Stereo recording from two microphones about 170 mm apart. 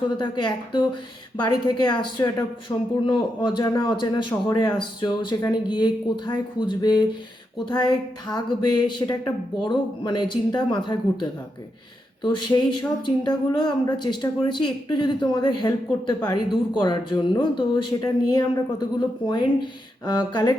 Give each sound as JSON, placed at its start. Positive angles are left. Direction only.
{"t": 0.2, "sound": "speech", "side_deg": 25}
{"t": 20.1, "sound": "speech", "side_deg": 25}